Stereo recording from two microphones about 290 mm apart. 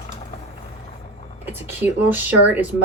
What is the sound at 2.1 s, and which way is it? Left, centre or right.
Speech, centre.